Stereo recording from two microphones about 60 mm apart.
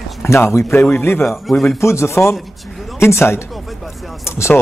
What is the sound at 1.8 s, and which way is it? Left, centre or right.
Speech, left.